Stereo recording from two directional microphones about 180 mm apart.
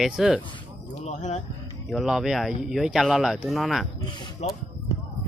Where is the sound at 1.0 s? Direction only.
40° left (ahead or behind).